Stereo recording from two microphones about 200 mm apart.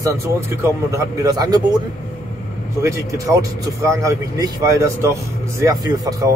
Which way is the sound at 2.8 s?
15° right (ahead or behind).